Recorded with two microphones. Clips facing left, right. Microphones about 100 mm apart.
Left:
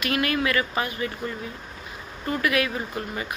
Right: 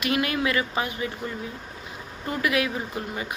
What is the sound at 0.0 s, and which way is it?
Speech, 20° right (ahead or behind).